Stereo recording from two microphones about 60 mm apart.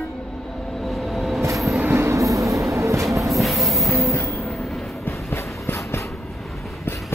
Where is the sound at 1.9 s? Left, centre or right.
Right.